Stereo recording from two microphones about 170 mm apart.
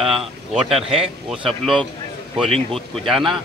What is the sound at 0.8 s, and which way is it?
Speech, 35° right (ahead or behind).